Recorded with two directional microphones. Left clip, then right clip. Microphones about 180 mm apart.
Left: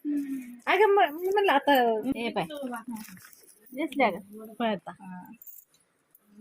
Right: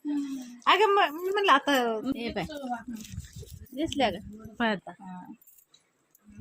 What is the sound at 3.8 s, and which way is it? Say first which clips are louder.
Speech: left 1 dB; 5° left (ahead or behind).